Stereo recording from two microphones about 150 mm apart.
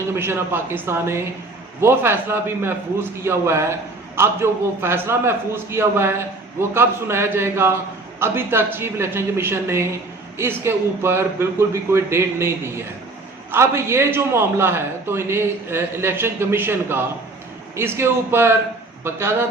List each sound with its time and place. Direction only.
0.2 s a man's voice: 15° right (ahead or behind)